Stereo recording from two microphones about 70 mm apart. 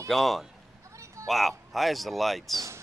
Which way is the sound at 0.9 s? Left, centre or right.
Right.